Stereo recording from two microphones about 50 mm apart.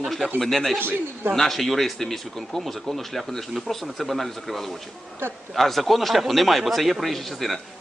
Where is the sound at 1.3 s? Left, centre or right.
Centre.